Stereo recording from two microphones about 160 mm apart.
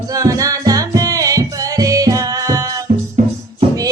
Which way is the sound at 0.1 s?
20° right (ahead or behind).